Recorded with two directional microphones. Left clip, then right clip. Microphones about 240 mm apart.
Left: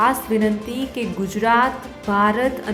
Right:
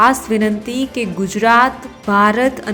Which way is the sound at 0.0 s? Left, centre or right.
Centre.